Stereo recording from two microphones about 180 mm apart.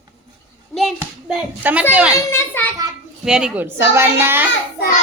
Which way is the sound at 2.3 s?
10° left (ahead or behind).